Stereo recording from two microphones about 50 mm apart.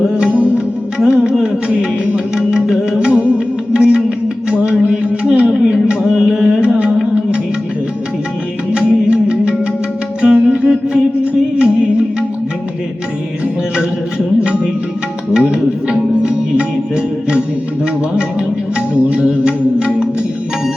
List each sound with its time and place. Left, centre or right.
0.3 s music: right
0.9 s music: centre
5.5 s a sound: centre
5.9 s carnatic music: centre
6.6 s music: right
8.7 s music: centre
15.3 s music: centre
19.1 s music: right